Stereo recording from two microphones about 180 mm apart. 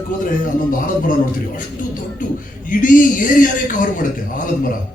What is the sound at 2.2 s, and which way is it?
A man's voice, 45° left (ahead or behind).